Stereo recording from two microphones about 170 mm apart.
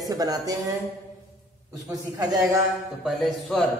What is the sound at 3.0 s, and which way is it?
Speech, centre (ahead or behind).